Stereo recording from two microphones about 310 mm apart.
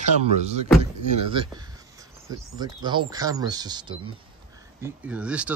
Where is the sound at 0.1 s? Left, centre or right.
Right.